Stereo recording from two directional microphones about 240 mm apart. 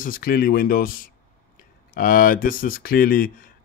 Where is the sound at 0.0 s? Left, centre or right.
Left.